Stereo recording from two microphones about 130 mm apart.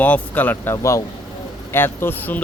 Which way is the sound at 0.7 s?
25° left (ahead or behind).